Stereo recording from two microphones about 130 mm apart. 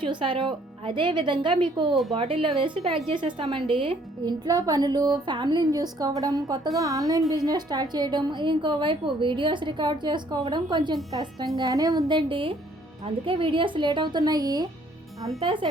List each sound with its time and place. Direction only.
0.0 s a woman's voice: 40° right (ahead or behind)